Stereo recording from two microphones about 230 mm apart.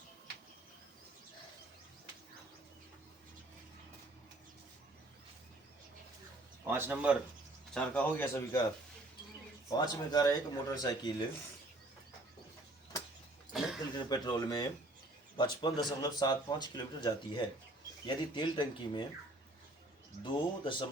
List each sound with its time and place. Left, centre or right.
6.7 s speech: centre
7.7 s speech: centre
9.6 s speech: centre
13.5 s a sound: centre
13.9 s speech: centre
20.2 s speech: left